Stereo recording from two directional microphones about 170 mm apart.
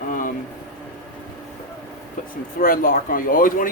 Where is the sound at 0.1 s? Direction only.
55° left (ahead or behind).